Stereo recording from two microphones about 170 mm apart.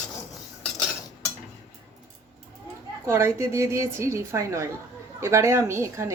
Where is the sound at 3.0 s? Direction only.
15° right (ahead or behind).